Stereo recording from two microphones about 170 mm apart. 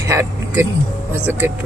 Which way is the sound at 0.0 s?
15° right (ahead or behind).